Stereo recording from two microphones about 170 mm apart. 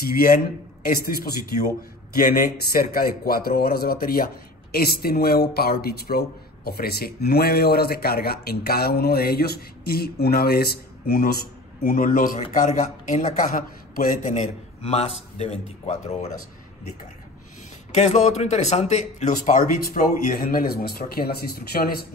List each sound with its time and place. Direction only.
0.0 s speech: 60° left (ahead or behind)
2.1 s speech: 55° left (ahead or behind)
11.8 s speech: 55° left (ahead or behind); by 16.3 s 40° left (ahead or behind)
17.9 s speech: 40° left (ahead or behind); by 21.9 s 65° left (ahead or behind)